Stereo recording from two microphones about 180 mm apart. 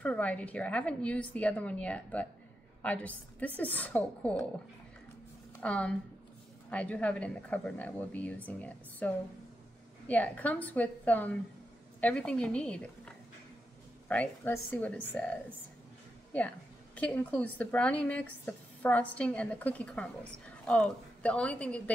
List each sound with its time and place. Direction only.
0.0 s a woman's voice: 5° left (ahead or behind)
5.6 s a woman's voice: 5° left (ahead or behind)
16.3 s a woman's voice: 10° left (ahead or behind)